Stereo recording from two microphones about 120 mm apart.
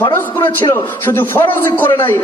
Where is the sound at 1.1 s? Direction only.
20° left (ahead or behind).